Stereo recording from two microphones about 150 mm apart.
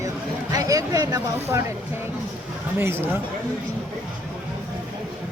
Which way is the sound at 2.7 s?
15° right (ahead or behind).